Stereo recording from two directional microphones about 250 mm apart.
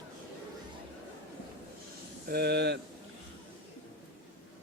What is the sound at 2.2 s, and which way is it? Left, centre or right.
Speech, right.